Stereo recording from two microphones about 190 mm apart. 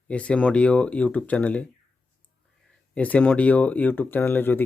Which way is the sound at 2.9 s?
10° left (ahead or behind).